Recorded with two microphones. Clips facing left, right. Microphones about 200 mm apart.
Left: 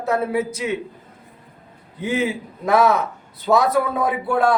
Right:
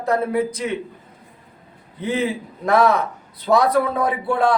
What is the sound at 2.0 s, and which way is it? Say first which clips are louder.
A man's voice: even; 10° left (ahead or behind).